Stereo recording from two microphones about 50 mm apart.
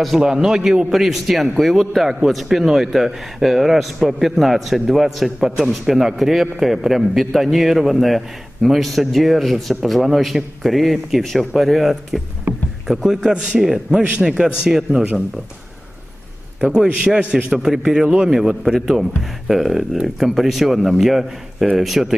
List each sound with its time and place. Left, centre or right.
0.0 s a man's voice: centre
12.5 s rowboat: right
13.0 s a man's voice: centre; by 15.2 s right
17.0 s a man's voice: centre